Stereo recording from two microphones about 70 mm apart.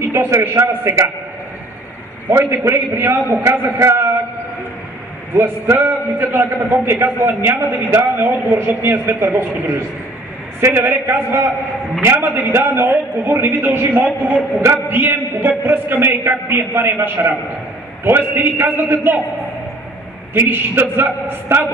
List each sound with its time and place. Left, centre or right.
0.4 s a man's voice: right
2.3 s a man's voice: right
5.3 s a man's voice: right
20.3 s a man's voice: right